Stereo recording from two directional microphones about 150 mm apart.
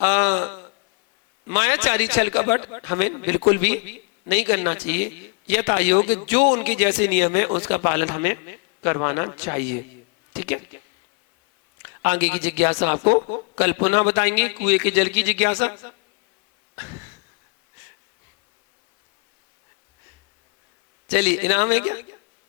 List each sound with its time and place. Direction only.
0.0 s a sound: 20° right (ahead or behind)
1.5 s a man's voice: 20° right (ahead or behind)
12.0 s a man's voice: 20° right (ahead or behind)
21.1 s a man's voice: 15° right (ahead or behind)